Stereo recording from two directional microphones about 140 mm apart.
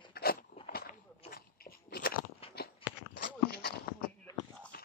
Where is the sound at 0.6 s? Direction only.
90° left.